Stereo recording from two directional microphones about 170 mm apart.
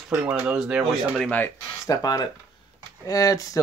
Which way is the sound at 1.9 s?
20° left (ahead or behind).